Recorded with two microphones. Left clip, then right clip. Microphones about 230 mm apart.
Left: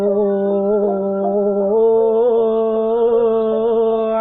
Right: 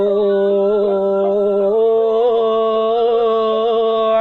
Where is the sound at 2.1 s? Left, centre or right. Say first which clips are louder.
Even; right.